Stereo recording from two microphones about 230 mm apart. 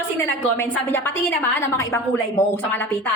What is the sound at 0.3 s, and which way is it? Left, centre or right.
A woman's voice, centre.